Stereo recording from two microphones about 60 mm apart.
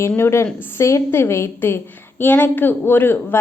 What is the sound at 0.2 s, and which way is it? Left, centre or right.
A woman's voice, left.